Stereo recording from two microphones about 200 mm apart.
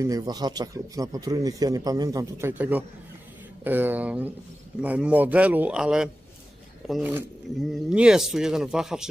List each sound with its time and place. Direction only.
0.0 s a man's voice: 15° right (ahead or behind)